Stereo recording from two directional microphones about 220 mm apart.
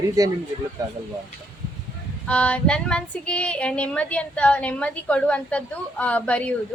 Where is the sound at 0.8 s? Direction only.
15° right (ahead or behind).